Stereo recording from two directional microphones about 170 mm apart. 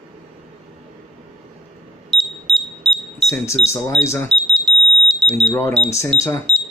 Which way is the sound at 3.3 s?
15° left (ahead or behind).